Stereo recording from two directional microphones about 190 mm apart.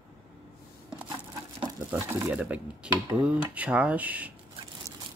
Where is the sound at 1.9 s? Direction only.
5° right (ahead or behind).